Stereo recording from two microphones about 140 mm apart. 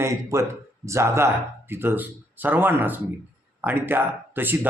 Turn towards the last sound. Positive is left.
turn(degrees=-15)  # may be behind; listen again after turning